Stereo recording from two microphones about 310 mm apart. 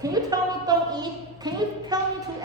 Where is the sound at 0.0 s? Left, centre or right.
Centre.